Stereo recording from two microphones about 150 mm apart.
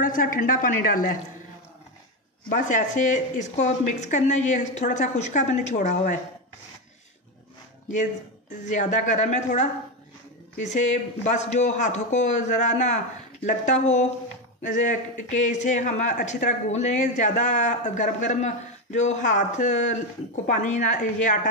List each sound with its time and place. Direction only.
0.0 s speech: 65° left (ahead or behind)
2.5 s speech: 55° left (ahead or behind)
7.9 s a woman's voice: 55° left (ahead or behind)